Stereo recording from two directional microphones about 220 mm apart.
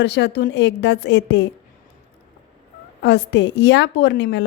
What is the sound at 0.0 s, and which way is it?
A woman's voice, 50° left (ahead or behind).